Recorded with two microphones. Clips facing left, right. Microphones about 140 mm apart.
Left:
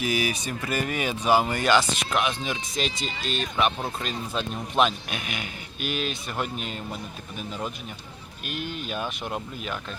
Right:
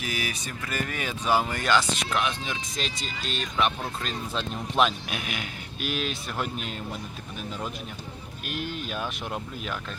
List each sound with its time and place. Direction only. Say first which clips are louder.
0.0 s a man's voice: left 6 dB; 15° left (ahead or behind); by 6.7 s centre (ahead or behind)
8.4 s a man's voice: left 1 dB; centre (ahead or behind)